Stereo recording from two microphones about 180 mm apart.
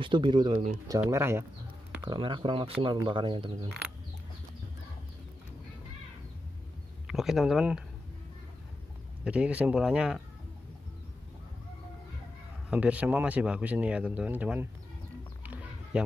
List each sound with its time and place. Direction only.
0.0 s speech: 25° right (ahead or behind)
1.0 s speech: 15° right (ahead or behind)
2.0 s speech: 25° right (ahead or behind)
7.1 s speech: centre (ahead or behind)
9.2 s speech: 5° right (ahead or behind)
12.6 s speech: 10° right (ahead or behind)
15.4 s a sound: 10° right (ahead or behind)